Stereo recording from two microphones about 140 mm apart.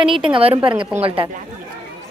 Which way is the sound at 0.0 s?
35° right (ahead or behind).